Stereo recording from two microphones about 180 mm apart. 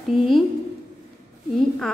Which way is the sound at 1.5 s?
5° left (ahead or behind).